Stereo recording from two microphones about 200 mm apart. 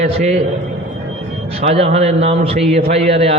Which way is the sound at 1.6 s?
30° right (ahead or behind).